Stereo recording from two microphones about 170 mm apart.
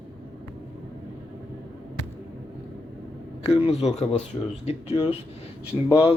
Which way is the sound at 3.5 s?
35° left (ahead or behind).